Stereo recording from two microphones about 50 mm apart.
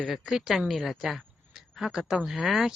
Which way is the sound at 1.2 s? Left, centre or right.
Centre.